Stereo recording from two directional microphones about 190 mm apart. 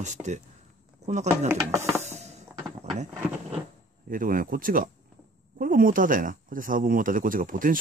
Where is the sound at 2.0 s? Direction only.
35° right (ahead or behind).